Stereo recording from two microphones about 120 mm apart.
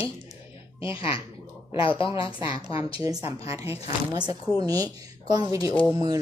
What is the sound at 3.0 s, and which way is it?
Speech, 30° right (ahead or behind).